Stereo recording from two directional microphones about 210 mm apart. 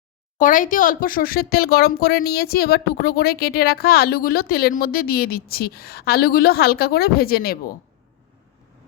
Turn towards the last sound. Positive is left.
turn(degrees=45)  # may be behind; listen again after turning